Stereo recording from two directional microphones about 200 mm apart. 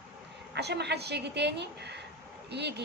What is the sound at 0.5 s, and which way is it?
A woman's voice, 55° right (ahead or behind).